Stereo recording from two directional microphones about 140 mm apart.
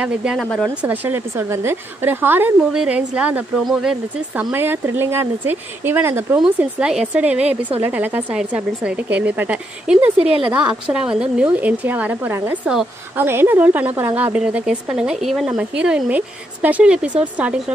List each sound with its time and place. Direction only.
0.0 s speech: 5° right (ahead or behind)
0.7 s a woman's voice: 15° right (ahead or behind)
10.1 s a woman's voice: 45° right (ahead or behind)
10.4 s a woman's voice: 10° right (ahead or behind)